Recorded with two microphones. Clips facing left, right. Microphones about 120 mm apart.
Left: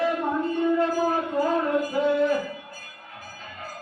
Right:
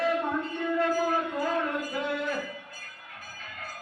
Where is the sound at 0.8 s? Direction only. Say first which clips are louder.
Left 3 dB; 30° left (ahead or behind).